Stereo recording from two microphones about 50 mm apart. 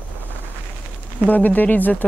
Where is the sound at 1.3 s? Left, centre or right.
Left.